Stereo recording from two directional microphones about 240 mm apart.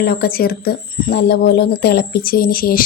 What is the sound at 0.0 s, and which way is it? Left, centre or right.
A woman's voice, left.